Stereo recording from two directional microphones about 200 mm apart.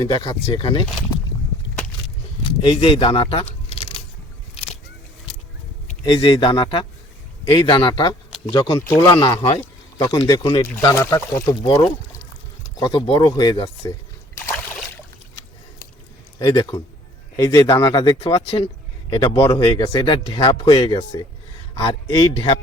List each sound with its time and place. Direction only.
0.1 s speech: 25° left (ahead or behind)
2.6 s speech: 25° left (ahead or behind)
5.9 s speech: 25° left (ahead or behind)
12.8 s speech: 25° left (ahead or behind)
16.4 s speech: 20° left (ahead or behind)